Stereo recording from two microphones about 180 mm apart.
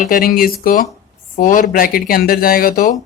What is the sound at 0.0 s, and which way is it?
Speech, 50° left (ahead or behind).